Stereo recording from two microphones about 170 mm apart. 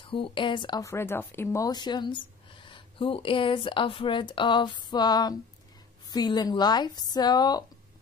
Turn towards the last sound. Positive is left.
turn(degrees=25)  # may be behind; listen again after turning